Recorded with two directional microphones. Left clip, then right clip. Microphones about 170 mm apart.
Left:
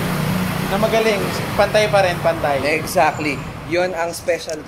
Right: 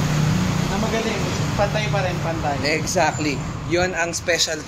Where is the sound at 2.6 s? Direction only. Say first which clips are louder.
Left 2 dB; centre (ahead or behind).